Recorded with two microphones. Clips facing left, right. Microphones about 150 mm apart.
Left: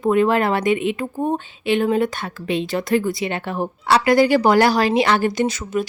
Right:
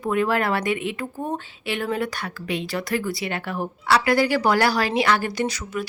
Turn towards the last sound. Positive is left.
turn(degrees=25)  # may be behind; listen again after turning